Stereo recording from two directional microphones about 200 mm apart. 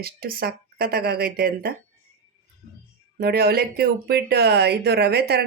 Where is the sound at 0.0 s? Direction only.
50° right (ahead or behind).